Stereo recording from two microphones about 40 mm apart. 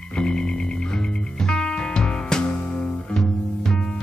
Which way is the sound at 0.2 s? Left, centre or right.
Left.